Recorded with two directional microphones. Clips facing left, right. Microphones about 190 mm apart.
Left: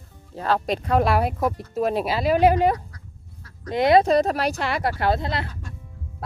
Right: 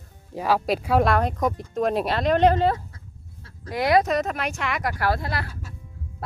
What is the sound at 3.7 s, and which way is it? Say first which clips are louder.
Speech: left 4 dB; 25° left (ahead or behind).